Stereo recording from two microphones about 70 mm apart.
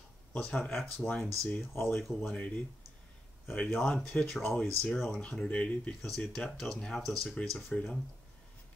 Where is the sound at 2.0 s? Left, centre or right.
Centre.